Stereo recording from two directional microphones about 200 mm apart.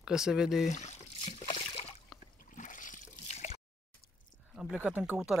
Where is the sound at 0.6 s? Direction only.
35° left (ahead or behind).